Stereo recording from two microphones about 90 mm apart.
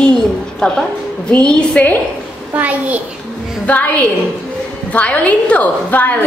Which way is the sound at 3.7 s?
15° left (ahead or behind).